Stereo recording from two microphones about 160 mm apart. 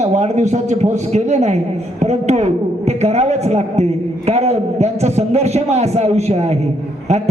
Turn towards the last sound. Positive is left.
turn(degrees=-45)  # may be behind; listen again after turning